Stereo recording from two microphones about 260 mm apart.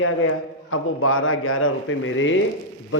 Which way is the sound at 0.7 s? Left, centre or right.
Left.